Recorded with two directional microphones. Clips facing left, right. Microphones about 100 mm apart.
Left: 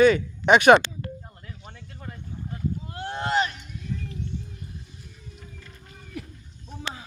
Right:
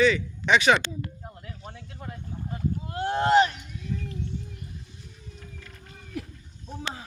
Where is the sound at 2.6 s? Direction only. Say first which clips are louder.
Right 3 dB; 40° right (ahead or behind).